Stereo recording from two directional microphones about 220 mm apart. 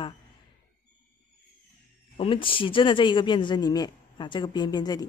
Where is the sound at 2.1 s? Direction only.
25° left (ahead or behind).